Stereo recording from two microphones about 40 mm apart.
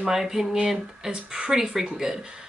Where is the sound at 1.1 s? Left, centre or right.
Right.